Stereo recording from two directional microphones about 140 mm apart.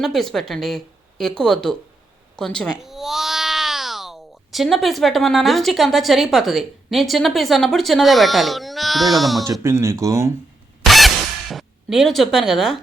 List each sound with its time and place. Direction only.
0.0 s speech: centre (ahead or behind)
9.5 s speech: 20° right (ahead or behind)
10.8 s a sound: centre (ahead or behind)